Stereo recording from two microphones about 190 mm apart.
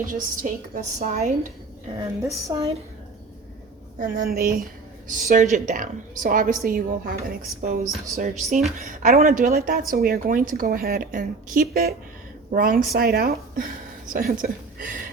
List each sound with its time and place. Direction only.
0.0 s a woman's voice: 45° right (ahead or behind)
2.2 s a woman's voice: 15° right (ahead or behind)
4.0 s a woman's voice: 50° right (ahead or behind)
5.0 s a woman's voice: 40° right (ahead or behind)